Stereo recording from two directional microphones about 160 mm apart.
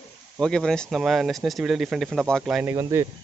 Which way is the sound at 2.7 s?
20° right (ahead or behind).